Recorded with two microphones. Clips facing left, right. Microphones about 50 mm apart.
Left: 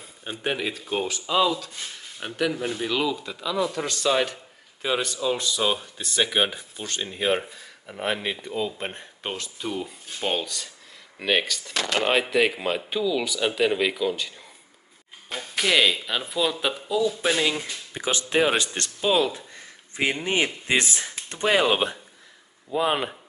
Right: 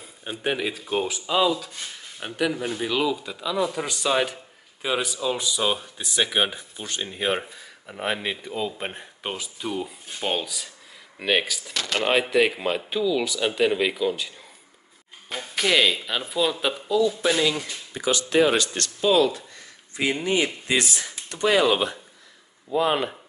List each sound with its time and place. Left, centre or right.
0.0 s speech: centre
17.4 s speech: left
22.7 s speech: centre